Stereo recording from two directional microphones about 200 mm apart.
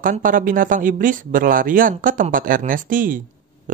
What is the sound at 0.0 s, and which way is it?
Speech, 40° right (ahead or behind).